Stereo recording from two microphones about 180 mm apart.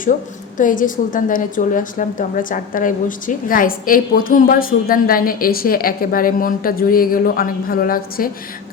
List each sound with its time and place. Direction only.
0.5 s a woman's voice: 45° left (ahead or behind)